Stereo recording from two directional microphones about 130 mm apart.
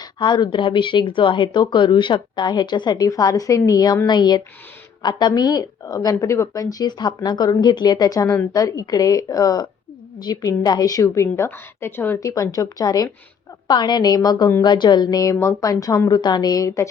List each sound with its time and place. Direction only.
0.0 s a woman's voice: 35° left (ahead or behind)